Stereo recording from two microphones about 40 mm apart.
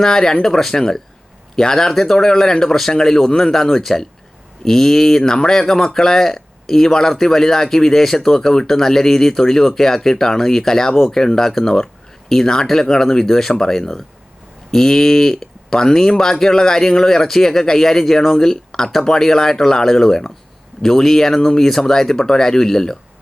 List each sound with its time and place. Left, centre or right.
0.0 s speech: centre